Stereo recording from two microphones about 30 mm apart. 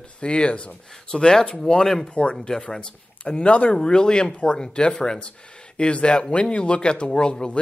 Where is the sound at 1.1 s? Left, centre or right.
Left.